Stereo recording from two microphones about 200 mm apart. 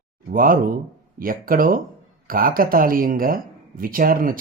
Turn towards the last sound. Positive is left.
turn(degrees=-45)  # may be behind; listen again after turning